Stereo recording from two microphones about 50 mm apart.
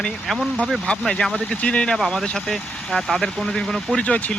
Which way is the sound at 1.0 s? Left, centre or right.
Centre.